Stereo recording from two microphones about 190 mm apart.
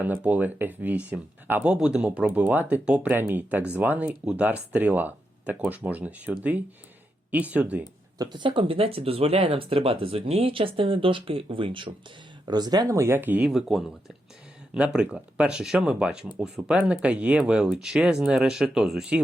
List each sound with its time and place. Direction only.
0.0 s speech: 10° right (ahead or behind)
8.2 s speech: 25° right (ahead or behind); by 19.2 s 5° right (ahead or behind)